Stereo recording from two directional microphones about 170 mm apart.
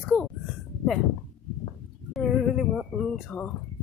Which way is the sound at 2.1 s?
Centre (ahead or behind).